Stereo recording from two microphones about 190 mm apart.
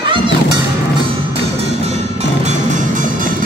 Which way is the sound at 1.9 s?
35° right (ahead or behind).